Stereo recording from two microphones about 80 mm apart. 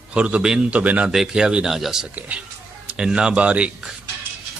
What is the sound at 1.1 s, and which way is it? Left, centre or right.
Speech, centre.